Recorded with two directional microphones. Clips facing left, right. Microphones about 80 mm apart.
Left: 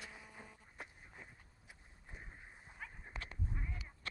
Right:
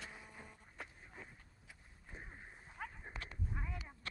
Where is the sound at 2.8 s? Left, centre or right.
Right.